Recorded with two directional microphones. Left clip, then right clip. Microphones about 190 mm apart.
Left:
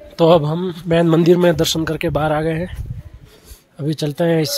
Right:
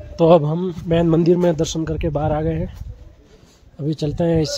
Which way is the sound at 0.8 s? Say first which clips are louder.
Left 3 dB; 10° left (ahead or behind).